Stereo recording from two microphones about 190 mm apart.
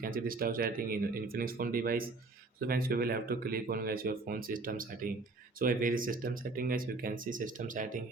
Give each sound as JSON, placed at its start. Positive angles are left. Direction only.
{"t": 0.0, "sound": "speech", "side_deg": -50}